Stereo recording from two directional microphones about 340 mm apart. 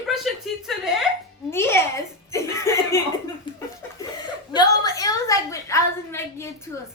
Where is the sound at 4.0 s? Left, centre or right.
Centre.